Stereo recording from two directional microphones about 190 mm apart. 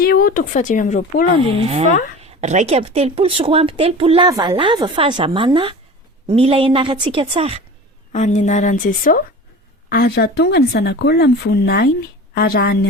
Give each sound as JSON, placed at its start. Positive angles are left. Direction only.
{"t": 0.0, "sound": "speech", "side_deg": 50}
{"t": 1.5, "sound": "a woman's voice", "side_deg": -30}
{"t": 8.1, "sound": "a woman's voice", "side_deg": 40}
{"t": 9.9, "sound": "speech", "side_deg": 60}